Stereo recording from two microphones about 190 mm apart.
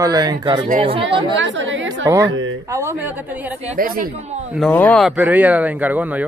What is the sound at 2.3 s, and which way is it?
Speech, 90° right.